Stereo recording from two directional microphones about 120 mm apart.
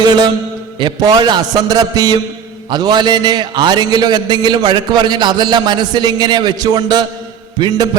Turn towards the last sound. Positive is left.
turn(degrees=-40)  # may be behind; listen again after turning